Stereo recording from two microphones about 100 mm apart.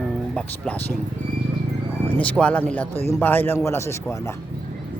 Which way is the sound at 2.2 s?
15° left (ahead or behind).